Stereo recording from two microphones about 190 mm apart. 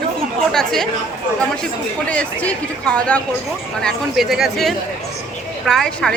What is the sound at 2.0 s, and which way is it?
Speech, 5° left (ahead or behind).